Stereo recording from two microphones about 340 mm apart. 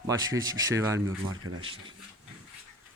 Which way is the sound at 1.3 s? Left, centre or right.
Right.